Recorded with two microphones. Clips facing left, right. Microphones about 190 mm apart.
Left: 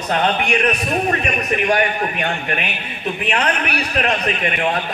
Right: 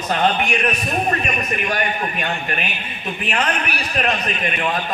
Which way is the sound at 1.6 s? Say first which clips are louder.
Left 6 dB; 65° left (ahead or behind).